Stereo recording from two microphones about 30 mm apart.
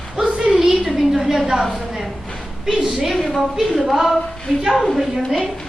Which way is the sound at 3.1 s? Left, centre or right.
Centre.